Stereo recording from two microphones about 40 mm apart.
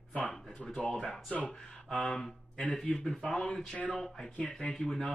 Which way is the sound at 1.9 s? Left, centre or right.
Centre.